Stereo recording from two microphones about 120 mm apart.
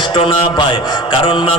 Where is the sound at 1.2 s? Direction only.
45° left (ahead or behind).